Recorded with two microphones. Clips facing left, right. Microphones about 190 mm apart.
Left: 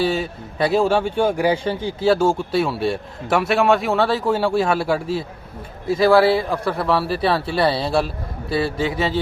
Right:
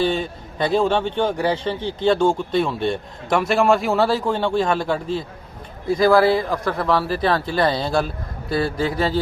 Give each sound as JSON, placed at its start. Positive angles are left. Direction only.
{"t": 0.0, "sound": "speech", "side_deg": 5}